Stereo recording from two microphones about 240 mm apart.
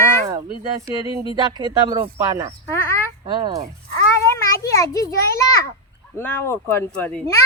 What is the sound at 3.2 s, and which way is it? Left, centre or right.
Speech, centre.